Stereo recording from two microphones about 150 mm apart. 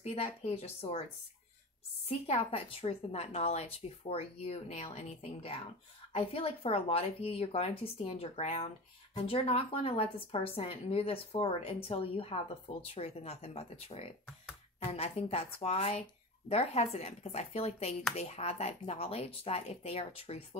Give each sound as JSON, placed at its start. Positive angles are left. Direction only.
{"t": 0.0, "sound": "speech", "side_deg": 45}
{"t": 2.0, "sound": "a woman's voice", "side_deg": 45}